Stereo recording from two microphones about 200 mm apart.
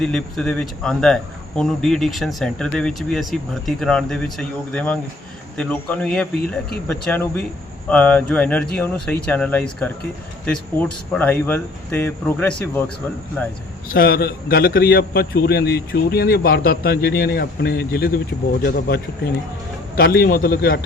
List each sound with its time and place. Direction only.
0.0 s speech: 5° left (ahead or behind)
13.8 s a man's voice: 50° left (ahead or behind)